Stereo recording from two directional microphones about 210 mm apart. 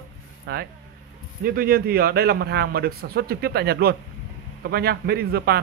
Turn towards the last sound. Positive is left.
turn(degrees=-50)  # may be behind; listen again after turning